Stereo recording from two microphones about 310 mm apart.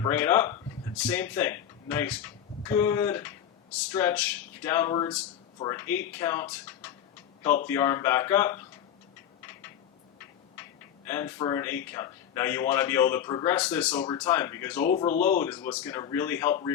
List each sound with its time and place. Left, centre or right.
0.0 s speech: centre
11.1 s speech: centre
14.8 s speech: left
15.4 s speech: centre